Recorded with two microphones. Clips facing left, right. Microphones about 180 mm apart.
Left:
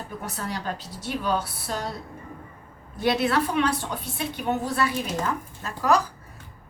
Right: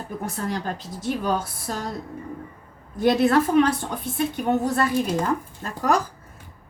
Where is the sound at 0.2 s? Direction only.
50° right (ahead or behind).